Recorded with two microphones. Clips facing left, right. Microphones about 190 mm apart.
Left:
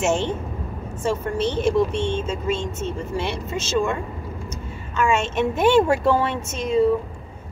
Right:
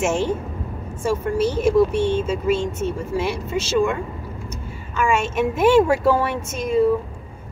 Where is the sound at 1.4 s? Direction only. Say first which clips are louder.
Right 3 dB; 5° right (ahead or behind).